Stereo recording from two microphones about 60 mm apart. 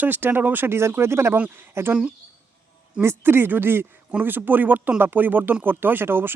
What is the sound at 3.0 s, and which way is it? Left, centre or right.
Speech, right.